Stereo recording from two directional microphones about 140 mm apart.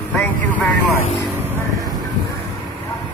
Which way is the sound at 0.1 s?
10° left (ahead or behind).